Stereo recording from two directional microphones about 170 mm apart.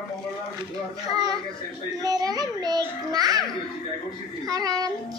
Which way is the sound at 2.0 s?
20° right (ahead or behind).